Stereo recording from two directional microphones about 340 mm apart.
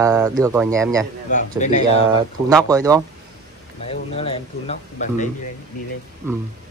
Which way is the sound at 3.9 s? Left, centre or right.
Centre.